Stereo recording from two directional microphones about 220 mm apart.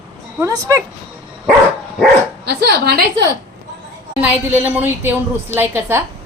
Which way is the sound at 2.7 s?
45° right (ahead or behind).